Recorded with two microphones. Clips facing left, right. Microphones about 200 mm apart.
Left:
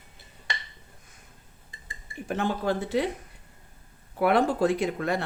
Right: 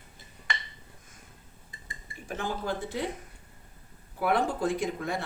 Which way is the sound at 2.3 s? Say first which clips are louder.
Left 5 dB; 60° left (ahead or behind).